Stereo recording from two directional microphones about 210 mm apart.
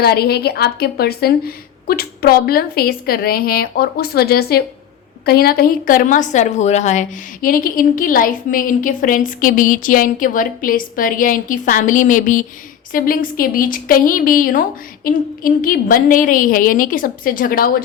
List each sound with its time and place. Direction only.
0.0 s a woman's voice: 50° left (ahead or behind)